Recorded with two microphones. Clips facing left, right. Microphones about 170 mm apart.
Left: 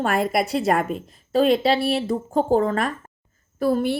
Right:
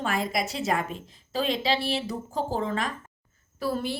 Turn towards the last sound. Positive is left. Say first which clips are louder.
# left 8 dB
turn(degrees=50)  # may be behind; listen again after turning